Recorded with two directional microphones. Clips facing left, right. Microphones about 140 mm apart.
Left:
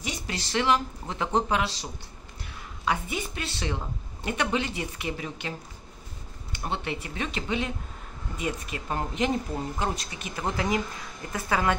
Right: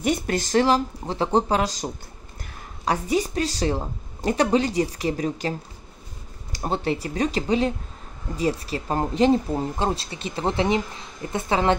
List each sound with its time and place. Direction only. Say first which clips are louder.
0.0 s a woman's voice: right 11 dB; 50° right (ahead or behind)
6.5 s a woman's voice: right 7 dB; 35° right (ahead or behind)